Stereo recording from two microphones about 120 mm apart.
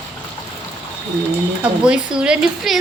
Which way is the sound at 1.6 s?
10° right (ahead or behind).